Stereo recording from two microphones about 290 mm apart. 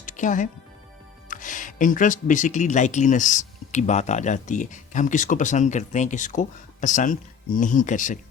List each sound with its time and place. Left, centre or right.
0.0 s music: left
1.3 s speech: left